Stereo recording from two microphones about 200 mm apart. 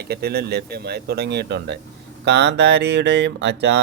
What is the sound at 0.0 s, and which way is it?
Speech, 55° right (ahead or behind).